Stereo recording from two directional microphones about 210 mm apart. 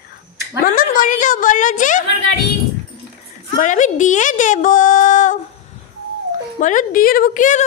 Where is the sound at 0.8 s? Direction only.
40° left (ahead or behind).